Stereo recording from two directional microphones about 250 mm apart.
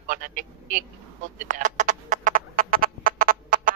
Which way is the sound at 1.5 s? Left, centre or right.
Right.